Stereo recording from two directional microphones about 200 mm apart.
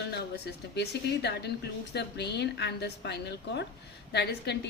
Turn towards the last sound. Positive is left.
turn(degrees=55)  # may be behind; listen again after turning